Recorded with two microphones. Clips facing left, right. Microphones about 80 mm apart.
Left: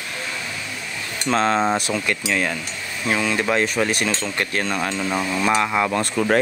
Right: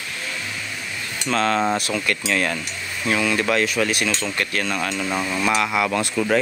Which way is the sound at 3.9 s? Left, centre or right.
Left.